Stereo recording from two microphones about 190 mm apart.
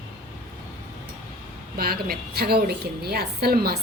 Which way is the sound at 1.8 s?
55° right (ahead or behind).